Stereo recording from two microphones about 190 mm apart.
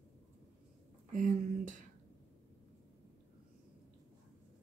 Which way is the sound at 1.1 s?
45° right (ahead or behind).